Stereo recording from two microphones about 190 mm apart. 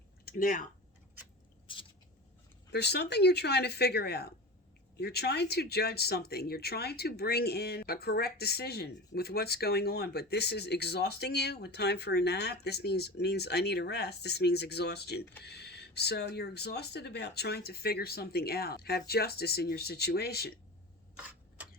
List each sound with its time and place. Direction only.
0.3 s speech: 45° left (ahead or behind)
1.6 s biting: 25° left (ahead or behind)
2.7 s speech: 60° left (ahead or behind)